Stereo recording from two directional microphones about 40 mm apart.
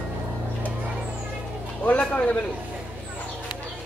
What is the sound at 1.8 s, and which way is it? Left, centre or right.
Speech, left.